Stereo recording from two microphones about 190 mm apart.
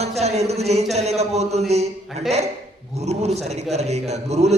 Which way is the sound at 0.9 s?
35° right (ahead or behind).